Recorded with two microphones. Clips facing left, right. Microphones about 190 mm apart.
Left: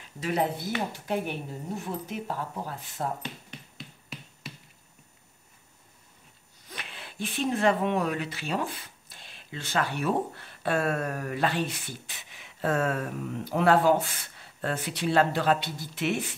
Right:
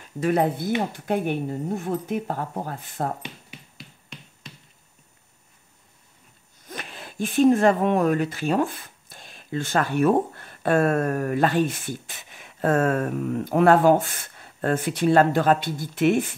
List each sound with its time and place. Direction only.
0.2 s speech: 50° right (ahead or behind)
3.2 s a sound: 10° right (ahead or behind)
4.4 s finger snapping: 5° left (ahead or behind)
6.7 s speech: 45° right (ahead or behind)